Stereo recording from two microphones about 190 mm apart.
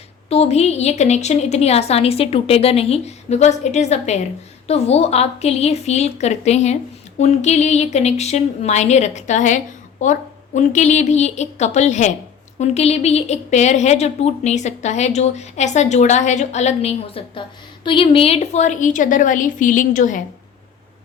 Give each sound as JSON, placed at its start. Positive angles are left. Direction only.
{"t": 0.3, "sound": "speech", "side_deg": 35}